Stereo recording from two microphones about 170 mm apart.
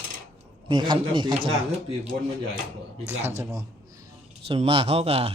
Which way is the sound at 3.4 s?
20° right (ahead or behind).